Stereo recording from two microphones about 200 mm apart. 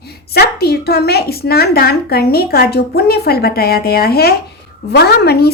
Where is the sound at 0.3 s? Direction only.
50° left (ahead or behind).